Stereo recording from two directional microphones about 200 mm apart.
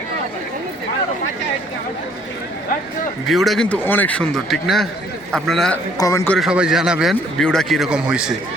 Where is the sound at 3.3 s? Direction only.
Centre (ahead or behind).